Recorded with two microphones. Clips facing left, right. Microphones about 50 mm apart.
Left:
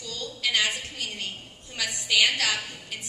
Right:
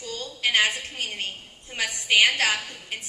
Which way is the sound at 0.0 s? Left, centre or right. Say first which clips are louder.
Right 3 dB; right.